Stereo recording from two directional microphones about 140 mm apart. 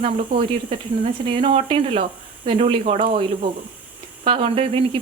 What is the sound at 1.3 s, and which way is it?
Speech, 40° right (ahead or behind).